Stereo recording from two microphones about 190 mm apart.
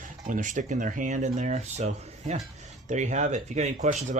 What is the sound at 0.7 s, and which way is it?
Speech, 40° right (ahead or behind).